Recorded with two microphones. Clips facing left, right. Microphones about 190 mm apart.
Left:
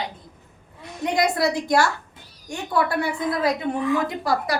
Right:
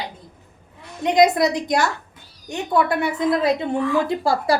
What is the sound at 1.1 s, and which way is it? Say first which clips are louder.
A woman's voice: right 5 dB; 20° right (ahead or behind).